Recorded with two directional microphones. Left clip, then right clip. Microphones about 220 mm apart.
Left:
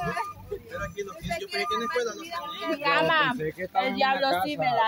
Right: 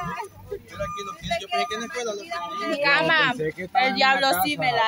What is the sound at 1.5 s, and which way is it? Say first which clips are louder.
Speech: even; 30° right (ahead or behind).